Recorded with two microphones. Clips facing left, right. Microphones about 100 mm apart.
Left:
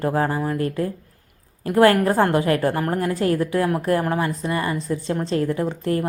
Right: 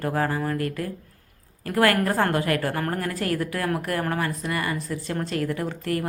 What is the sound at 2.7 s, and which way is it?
Speech, 15° left (ahead or behind).